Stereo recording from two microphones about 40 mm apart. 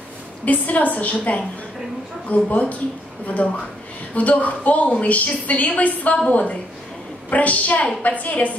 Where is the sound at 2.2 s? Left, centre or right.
Left.